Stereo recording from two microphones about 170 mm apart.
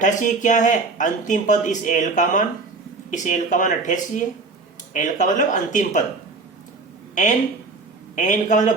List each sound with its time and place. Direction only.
0.0 s speech: 50° left (ahead or behind)
7.2 s speech: 50° left (ahead or behind)